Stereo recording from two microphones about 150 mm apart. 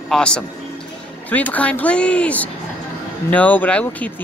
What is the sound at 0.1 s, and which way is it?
A man's voice, 5° left (ahead or behind).